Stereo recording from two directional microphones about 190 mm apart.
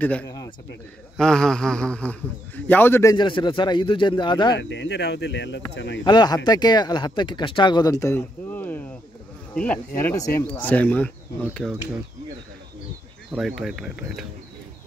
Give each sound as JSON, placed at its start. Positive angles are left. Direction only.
{"t": 0.0, "sound": "speech", "side_deg": 10}
{"t": 1.1, "sound": "speech", "side_deg": 5}
{"t": 4.6, "sound": "speech", "side_deg": 65}
{"t": 6.0, "sound": "speech", "side_deg": 20}
{"t": 13.3, "sound": "speech", "side_deg": -5}